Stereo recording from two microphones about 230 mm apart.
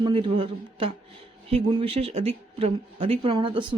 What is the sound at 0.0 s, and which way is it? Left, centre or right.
A man's voice, right.